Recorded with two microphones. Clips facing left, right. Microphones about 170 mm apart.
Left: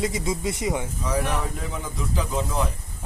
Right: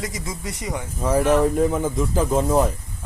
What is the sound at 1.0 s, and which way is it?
Speech, 50° right (ahead or behind).